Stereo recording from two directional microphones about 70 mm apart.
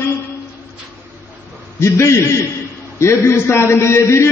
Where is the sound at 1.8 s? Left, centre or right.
Left.